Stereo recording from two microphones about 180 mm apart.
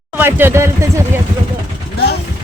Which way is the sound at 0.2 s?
10° right (ahead or behind).